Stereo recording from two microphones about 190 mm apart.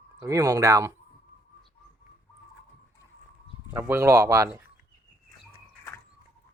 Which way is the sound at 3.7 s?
10° right (ahead or behind).